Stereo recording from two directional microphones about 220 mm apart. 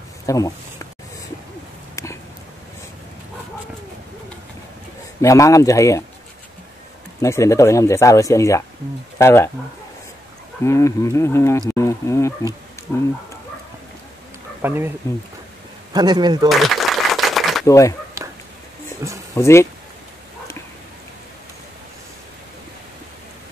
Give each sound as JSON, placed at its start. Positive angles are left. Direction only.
{"t": 0.3, "sound": "speech", "side_deg": 15}
{"t": 2.0, "sound": "a sound", "side_deg": 15}
{"t": 5.2, "sound": "speech", "side_deg": 15}
{"t": 7.2, "sound": "speech", "side_deg": 15}
{"t": 10.6, "sound": "speech", "side_deg": 15}
{"t": 14.6, "sound": "speech", "side_deg": -10}
{"t": 15.9, "sound": "speech", "side_deg": -20}
{"t": 16.4, "sound": "a sound", "side_deg": 0}
{"t": 17.6, "sound": "speech", "side_deg": 15}
{"t": 19.0, "sound": "speech", "side_deg": -15}
{"t": 19.3, "sound": "speech", "side_deg": 15}